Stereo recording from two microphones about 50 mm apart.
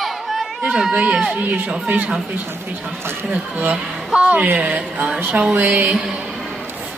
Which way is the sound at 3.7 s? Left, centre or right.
Right.